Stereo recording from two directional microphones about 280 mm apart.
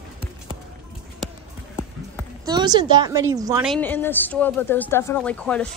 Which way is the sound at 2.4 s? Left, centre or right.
Centre.